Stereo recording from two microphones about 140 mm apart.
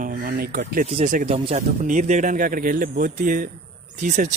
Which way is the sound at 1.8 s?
60° right (ahead or behind).